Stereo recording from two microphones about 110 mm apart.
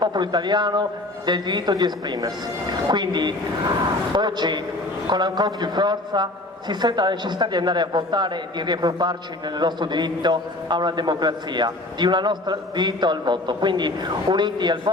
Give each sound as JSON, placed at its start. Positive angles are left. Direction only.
{"t": 0.0, "sound": "a man's voice", "side_deg": -40}